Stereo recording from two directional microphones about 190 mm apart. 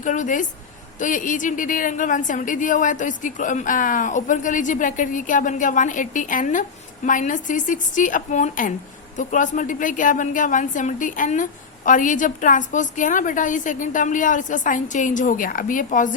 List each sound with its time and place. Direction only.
0.0 s a woman's voice: 40° left (ahead or behind)